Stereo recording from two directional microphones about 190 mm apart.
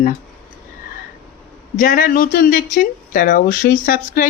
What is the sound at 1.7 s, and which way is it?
Speech, 45° left (ahead or behind).